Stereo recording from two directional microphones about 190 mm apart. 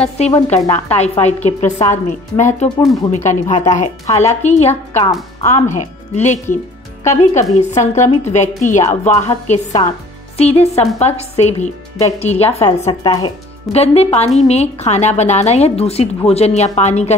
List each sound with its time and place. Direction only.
0.0 s a woman's voice: 35° left (ahead or behind)
13.0 s speech: 20° left (ahead or behind)
13.7 s a woman's voice: 30° left (ahead or behind)